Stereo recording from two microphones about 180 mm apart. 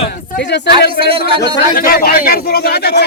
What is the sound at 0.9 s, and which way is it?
Speech, 30° right (ahead or behind).